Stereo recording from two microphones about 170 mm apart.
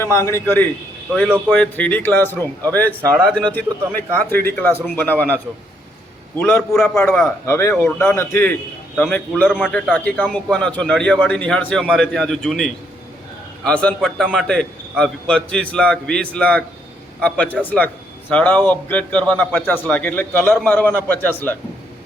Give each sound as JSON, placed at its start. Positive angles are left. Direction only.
{"t": 0.0, "sound": "a man's voice", "side_deg": 15}